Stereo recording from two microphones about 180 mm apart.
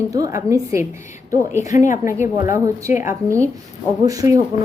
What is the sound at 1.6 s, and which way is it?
Speech, 40° left (ahead or behind).